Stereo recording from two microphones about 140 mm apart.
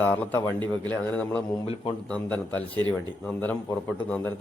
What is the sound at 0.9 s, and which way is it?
Speech, 10° left (ahead or behind).